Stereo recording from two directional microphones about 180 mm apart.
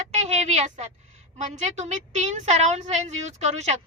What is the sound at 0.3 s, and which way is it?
A woman's voice, 40° right (ahead or behind).